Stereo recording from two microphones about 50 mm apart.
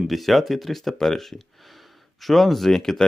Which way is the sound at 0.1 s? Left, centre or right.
Centre.